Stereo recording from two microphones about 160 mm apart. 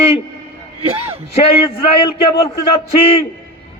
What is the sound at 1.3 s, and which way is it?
A man's voice, 35° left (ahead or behind).